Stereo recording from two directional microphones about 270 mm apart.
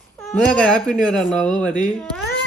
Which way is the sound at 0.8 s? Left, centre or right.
Centre.